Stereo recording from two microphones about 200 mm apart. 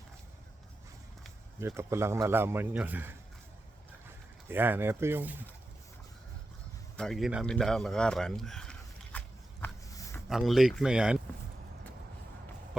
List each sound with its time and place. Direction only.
1.5 s a man's voice: 15° right (ahead or behind)
6.9 s speech: centre (ahead or behind)
9.1 s a sound: 10° left (ahead or behind)
10.2 s speech: centre (ahead or behind)